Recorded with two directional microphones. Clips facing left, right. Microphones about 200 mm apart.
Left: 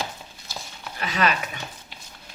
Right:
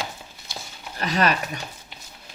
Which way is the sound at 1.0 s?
40° right (ahead or behind).